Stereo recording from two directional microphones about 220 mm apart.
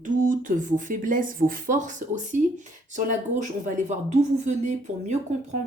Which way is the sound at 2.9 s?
35° right (ahead or behind).